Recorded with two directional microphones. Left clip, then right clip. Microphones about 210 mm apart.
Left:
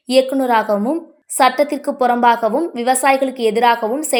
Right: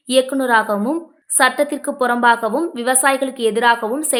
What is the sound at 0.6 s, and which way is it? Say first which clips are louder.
Speech: left 2 dB; 15° right (ahead or behind).